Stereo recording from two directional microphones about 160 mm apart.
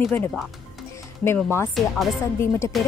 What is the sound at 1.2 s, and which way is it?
Speech, 15° left (ahead or behind).